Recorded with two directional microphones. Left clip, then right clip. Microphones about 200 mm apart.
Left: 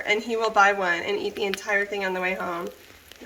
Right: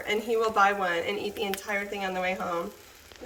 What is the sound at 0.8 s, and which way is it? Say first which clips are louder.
Speech: left 3 dB; 20° left (ahead or behind).